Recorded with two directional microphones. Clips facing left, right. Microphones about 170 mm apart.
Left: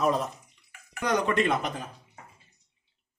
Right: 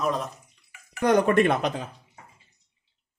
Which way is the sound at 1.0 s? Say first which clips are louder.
Right 6 dB; 55° right (ahead or behind).